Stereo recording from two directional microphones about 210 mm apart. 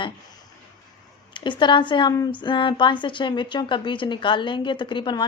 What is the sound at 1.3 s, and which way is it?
A woman's voice, 20° left (ahead or behind).